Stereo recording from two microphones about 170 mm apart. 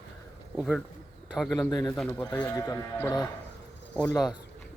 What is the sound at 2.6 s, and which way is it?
Speech, 20° left (ahead or behind).